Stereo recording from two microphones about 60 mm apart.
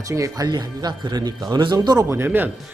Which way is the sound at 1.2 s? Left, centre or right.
Right.